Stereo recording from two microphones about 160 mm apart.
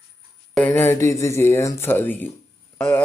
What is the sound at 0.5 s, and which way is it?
Speech, 10° left (ahead or behind).